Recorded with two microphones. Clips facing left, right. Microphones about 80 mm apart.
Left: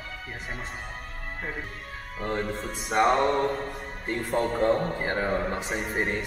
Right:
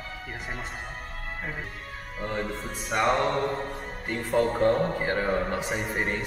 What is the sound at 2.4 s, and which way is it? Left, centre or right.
Speech, centre.